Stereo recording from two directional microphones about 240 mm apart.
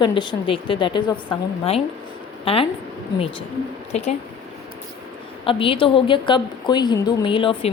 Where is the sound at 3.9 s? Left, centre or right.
Left.